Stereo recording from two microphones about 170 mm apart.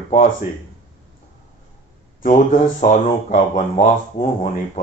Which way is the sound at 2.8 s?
55° left (ahead or behind).